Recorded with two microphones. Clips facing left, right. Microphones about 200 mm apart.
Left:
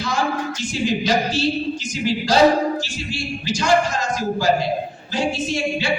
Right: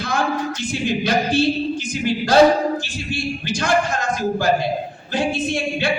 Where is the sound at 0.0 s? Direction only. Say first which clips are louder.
Right 1 dB; 55° right (ahead or behind).